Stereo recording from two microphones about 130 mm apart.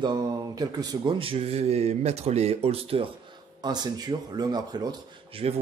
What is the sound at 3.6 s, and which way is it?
Speech, 35° right (ahead or behind).